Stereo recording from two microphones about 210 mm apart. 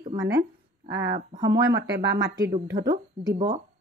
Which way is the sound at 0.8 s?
55° right (ahead or behind).